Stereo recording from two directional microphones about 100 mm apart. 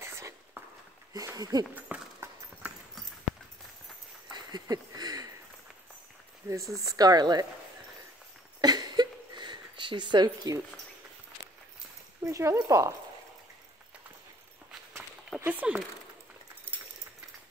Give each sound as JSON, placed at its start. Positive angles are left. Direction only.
{"t": 0.0, "sound": "a sound", "side_deg": -25}
{"t": 1.1, "sound": "speech", "side_deg": -40}
{"t": 1.8, "sound": "clip-clop", "side_deg": -15}
{"t": 4.3, "sound": "a sound", "side_deg": -45}
{"t": 6.4, "sound": "speech", "side_deg": -20}
{"t": 6.8, "sound": "speech", "side_deg": -35}
{"t": 8.5, "sound": "a sound", "side_deg": -45}
{"t": 12.3, "sound": "speech", "side_deg": -30}
{"t": 14.7, "sound": "walk", "side_deg": -5}
{"t": 15.4, "sound": "speech", "side_deg": -15}